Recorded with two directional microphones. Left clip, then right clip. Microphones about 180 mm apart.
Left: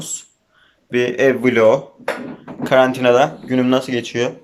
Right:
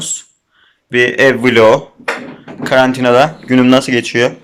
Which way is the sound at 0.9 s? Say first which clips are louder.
Right 6 dB; centre (ahead or behind).